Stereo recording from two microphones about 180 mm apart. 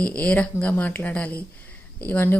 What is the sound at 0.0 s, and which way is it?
A woman's voice, 5° left (ahead or behind).